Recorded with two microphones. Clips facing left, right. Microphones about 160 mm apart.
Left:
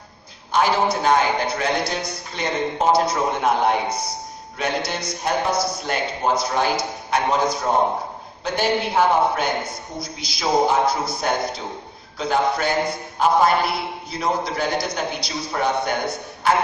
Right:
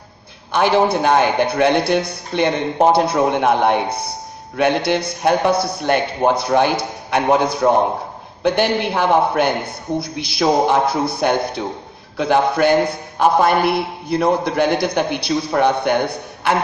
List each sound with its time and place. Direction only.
0.5 s a man's voice: 60° right (ahead or behind)